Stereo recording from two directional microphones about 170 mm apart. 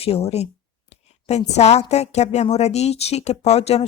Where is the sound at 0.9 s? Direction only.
40° left (ahead or behind).